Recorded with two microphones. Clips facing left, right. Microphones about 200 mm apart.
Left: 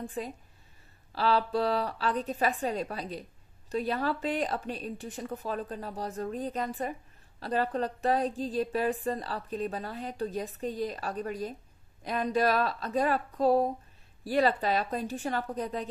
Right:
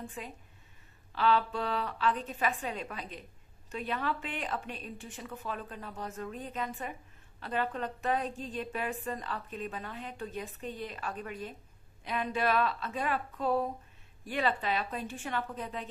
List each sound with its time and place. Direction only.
0.0 s speech: 35° left (ahead or behind)